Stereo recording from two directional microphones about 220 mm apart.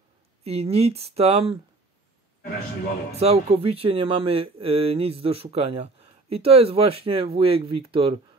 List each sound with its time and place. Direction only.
0.4 s speech: 25° right (ahead or behind)
3.1 s speech: 30° right (ahead or behind)